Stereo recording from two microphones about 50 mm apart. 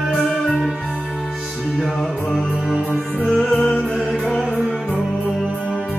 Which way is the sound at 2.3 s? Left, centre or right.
Centre.